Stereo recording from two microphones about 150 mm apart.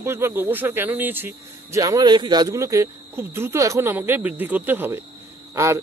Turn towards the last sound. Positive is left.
turn(degrees=-20)  # may be behind; listen again after turning